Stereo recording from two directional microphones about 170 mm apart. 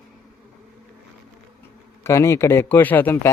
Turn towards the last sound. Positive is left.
turn(degrees=10)  # may be behind; listen again after turning